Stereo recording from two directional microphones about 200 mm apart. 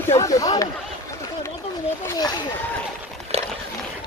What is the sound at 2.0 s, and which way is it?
Speech, 20° left (ahead or behind).